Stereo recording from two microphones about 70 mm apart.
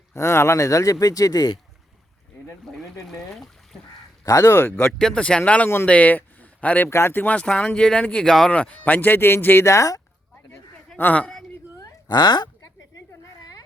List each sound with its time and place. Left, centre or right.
0.1 s speech: left
3.1 s speech: centre
4.2 s speech: left
4.5 s speech: left
4.9 s speech: centre; by 6.8 s left
6.8 s speech: left
7.3 s speech: centre
8.5 s speech: left
9.6 s speech: left
10.9 s speech: left
11.2 s speech: centre
11.8 s a sound: left
13.4 s a sound: left